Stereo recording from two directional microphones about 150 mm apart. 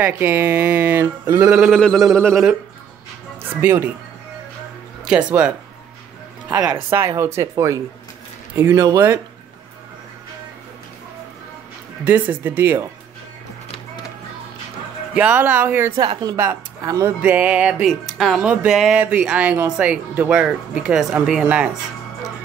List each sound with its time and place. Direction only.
0.0 s speech: 15° right (ahead or behind)
1.8 s speech: 5° left (ahead or behind)
2.0 s speech: 15° right (ahead or behind)
3.6 s speech: 15° right (ahead or behind)
5.0 s speech: 5° right (ahead or behind)
6.6 s speech: 20° right (ahead or behind)
12.1 s speech: 10° right (ahead or behind)
15.1 s speech: 10° right (ahead or behind)
16.0 s speech: 30° right (ahead or behind)
17.2 s speech: 10° right (ahead or behind)